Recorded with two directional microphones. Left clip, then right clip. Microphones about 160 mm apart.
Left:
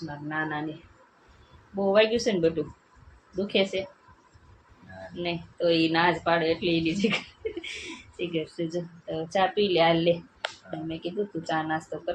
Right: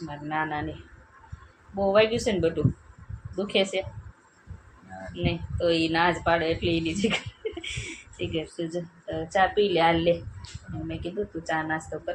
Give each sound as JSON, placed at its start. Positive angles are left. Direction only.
{"t": 0.1, "sound": "a woman's voice", "side_deg": 15}
{"t": 1.7, "sound": "a woman's voice", "side_deg": 15}
{"t": 5.1, "sound": "a woman's voice", "side_deg": 15}